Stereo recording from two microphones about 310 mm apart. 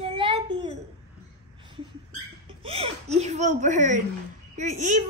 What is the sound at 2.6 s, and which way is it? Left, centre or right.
Speech, centre.